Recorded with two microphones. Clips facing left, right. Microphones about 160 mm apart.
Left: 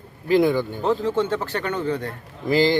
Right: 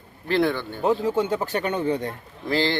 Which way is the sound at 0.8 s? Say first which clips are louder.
Right 5 dB; 10° right (ahead or behind).